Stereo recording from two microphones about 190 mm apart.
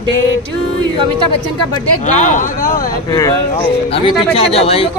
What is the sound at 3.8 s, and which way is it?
Speech, 30° left (ahead or behind).